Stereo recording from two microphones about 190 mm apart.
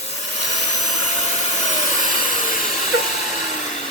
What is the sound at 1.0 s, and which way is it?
Vacuum cleaner, 40° left (ahead or behind).